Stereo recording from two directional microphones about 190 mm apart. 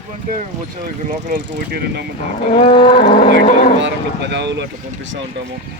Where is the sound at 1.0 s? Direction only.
50° right (ahead or behind).